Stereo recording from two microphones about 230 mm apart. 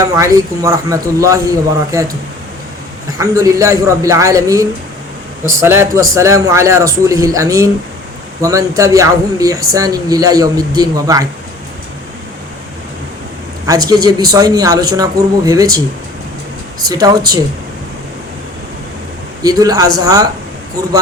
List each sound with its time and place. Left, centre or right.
0.2 s speech: centre
3.2 s speech: centre
13.7 s speech: centre
16.8 s speech: centre
19.4 s speech: centre